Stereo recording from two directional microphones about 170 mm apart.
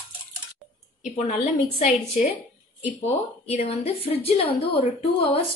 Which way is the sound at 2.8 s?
35° left (ahead or behind).